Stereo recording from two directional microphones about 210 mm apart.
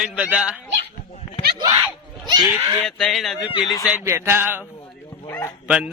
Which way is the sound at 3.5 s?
20° left (ahead or behind).